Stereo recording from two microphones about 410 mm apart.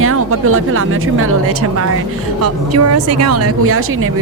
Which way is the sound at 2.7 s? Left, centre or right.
Right.